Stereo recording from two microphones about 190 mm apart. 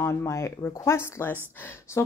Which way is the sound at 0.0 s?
15° left (ahead or behind).